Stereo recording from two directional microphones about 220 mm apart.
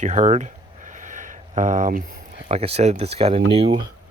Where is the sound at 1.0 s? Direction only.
35° right (ahead or behind).